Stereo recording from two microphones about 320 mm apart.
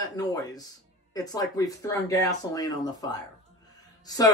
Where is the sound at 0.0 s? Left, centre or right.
Centre.